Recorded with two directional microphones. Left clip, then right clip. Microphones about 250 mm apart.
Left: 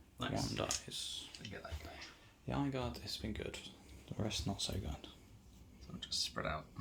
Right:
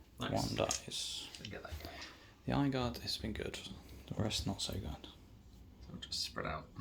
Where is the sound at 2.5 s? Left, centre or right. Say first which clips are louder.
Right 4 dB; right.